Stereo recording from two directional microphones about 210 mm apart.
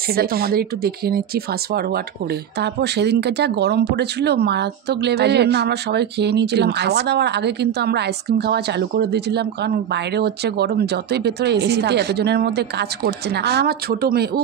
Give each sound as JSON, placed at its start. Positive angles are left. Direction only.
{"t": 0.1, "sound": "speech", "side_deg": -45}